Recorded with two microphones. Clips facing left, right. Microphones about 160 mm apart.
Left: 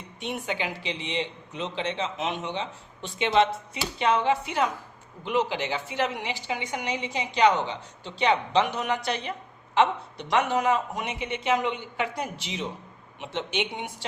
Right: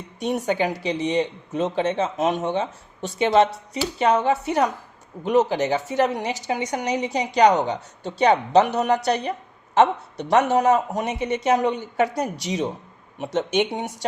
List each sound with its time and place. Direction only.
0.2 s speech: 40° right (ahead or behind)